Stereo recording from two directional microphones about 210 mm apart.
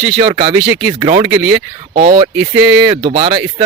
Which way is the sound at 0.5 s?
5° right (ahead or behind).